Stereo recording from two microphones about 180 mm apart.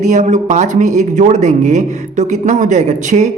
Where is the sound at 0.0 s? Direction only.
40° right (ahead or behind).